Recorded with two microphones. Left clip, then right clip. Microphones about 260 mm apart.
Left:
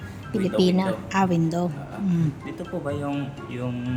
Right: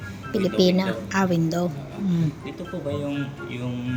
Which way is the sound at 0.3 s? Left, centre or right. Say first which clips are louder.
Right 2 dB; centre.